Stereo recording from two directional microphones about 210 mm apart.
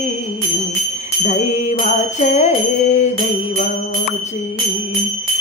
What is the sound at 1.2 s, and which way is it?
Music, 30° left (ahead or behind).